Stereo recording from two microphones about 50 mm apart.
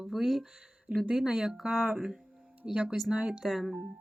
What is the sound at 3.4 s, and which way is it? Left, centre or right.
Speech, centre.